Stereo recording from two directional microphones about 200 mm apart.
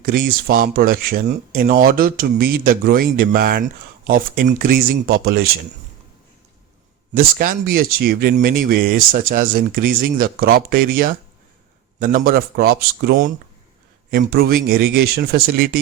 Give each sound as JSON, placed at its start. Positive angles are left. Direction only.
{"t": 0.0, "sound": "speech", "side_deg": -45}
{"t": 7.2, "sound": "speech", "side_deg": -45}